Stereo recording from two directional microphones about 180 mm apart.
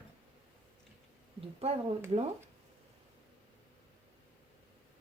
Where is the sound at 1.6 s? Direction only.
35° right (ahead or behind).